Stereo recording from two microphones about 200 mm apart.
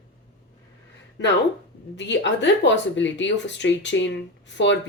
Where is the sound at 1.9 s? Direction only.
60° left (ahead or behind).